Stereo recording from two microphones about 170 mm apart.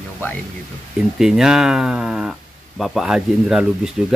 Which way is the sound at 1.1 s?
Centre (ahead or behind).